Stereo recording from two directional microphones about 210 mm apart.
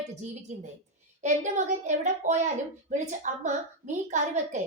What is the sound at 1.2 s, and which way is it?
A woman's voice, 35° right (ahead or behind).